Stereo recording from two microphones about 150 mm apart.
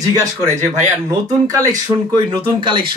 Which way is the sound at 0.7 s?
25° right (ahead or behind).